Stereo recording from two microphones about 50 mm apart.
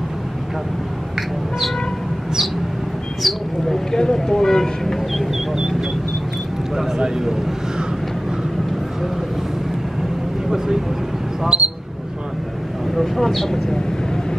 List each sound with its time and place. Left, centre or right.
3.2 s speech: centre
5.5 s vehicle: centre
7.0 s speech: centre
11.4 s speech: centre
12.9 s speech: centre